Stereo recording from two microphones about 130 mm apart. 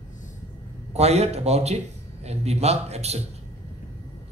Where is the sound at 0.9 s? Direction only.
55° right (ahead or behind).